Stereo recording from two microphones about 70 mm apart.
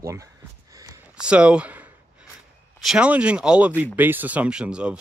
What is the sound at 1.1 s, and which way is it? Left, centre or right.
Speech, centre.